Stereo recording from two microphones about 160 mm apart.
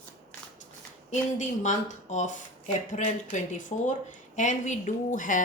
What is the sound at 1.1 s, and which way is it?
A woman's voice, 50° left (ahead or behind).